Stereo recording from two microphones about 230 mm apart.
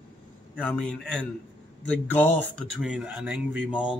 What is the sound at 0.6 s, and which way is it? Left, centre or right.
Speech, centre.